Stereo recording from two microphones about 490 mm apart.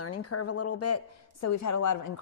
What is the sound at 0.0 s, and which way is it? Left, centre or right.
A woman's voice, left.